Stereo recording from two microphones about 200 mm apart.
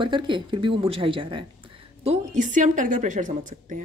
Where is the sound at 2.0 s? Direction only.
35° right (ahead or behind).